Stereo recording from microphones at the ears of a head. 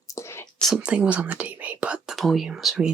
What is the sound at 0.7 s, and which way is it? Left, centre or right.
Speech, right.